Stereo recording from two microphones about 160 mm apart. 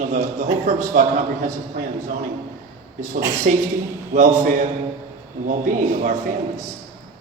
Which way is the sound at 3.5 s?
55° right (ahead or behind).